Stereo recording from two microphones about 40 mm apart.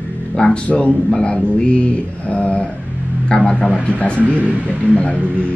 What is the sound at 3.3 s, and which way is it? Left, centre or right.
Speech, centre.